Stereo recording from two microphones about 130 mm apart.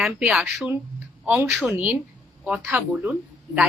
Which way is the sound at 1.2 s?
15° right (ahead or behind).